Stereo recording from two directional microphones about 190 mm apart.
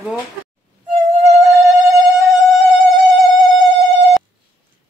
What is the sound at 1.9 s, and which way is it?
Music, 15° right (ahead or behind).